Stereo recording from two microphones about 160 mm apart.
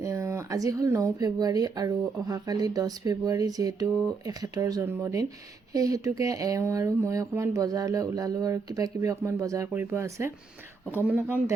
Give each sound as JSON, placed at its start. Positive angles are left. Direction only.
{"t": 0.0, "sound": "speech", "side_deg": -20}